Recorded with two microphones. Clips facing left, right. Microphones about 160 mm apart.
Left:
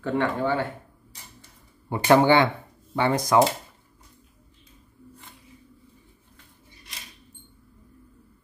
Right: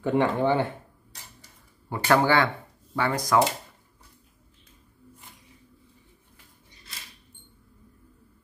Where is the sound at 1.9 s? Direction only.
20° left (ahead or behind).